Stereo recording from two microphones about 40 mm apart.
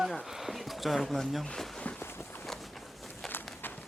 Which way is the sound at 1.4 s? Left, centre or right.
Centre.